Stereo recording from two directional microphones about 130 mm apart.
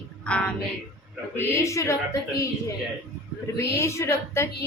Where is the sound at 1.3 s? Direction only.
25° left (ahead or behind).